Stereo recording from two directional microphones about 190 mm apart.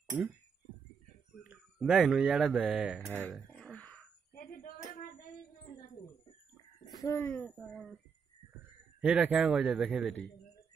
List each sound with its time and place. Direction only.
1.4 s speech: 5° right (ahead or behind)
3.5 s wail: 5° left (ahead or behind)
4.4 s tambourine: 50° left (ahead or behind)
6.9 s speech: 20° left (ahead or behind)
9.0 s a man's voice: 5° right (ahead or behind)